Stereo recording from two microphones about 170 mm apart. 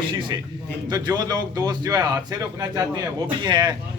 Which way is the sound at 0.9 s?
25° right (ahead or behind).